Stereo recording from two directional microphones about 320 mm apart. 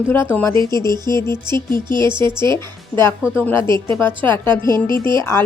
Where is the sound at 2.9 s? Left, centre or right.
Centre.